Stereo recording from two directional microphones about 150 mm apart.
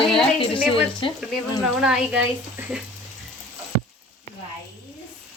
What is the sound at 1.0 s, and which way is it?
Speech, 35° left (ahead or behind).